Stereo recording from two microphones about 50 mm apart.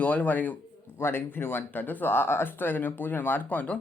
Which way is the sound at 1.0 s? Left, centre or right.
Left.